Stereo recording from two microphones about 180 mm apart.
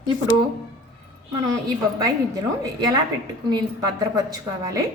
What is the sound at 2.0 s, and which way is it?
A woman's voice, 20° right (ahead or behind).